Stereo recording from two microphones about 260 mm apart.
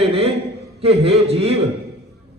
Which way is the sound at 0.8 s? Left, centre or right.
Right.